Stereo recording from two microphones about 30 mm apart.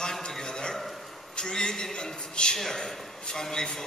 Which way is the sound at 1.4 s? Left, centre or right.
Centre.